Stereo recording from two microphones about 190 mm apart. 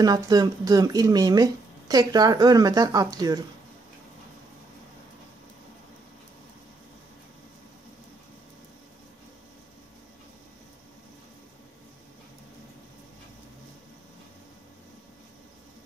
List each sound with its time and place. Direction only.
0.0 s speech: 20° right (ahead or behind)